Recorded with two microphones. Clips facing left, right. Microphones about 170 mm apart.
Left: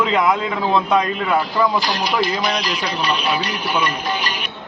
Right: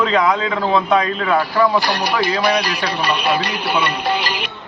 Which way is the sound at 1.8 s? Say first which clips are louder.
Right 1 dB; 65° right (ahead or behind).